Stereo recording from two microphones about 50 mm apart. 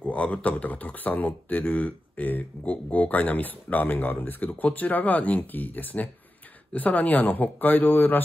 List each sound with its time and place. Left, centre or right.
0.0 s speech: left